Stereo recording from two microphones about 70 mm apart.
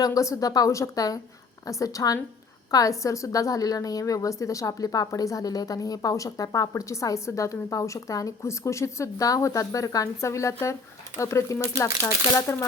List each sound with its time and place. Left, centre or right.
0.0 s a woman's voice: left